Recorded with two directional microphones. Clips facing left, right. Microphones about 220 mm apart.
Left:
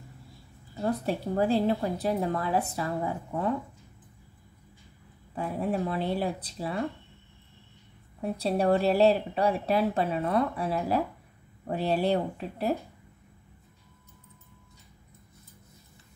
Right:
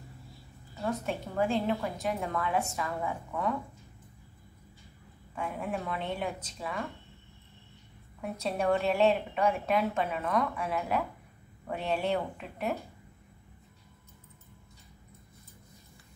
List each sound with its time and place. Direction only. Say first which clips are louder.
0.8 s speech: left 4 dB; 35° left (ahead or behind)
5.3 s speech: left 5 dB; 35° left (ahead or behind)
8.2 s speech: left 5 dB; 35° left (ahead or behind)